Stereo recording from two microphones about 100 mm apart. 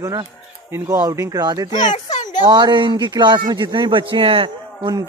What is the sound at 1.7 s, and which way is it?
Speech, 40° left (ahead or behind).